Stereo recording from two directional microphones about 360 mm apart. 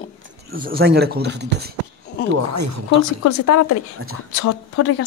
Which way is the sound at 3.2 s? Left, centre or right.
Left.